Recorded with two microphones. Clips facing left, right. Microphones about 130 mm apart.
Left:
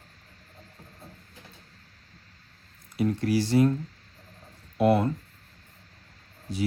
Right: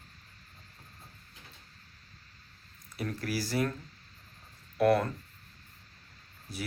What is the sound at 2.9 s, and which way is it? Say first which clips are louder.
Speech: left 9 dB; 20° left (ahead or behind).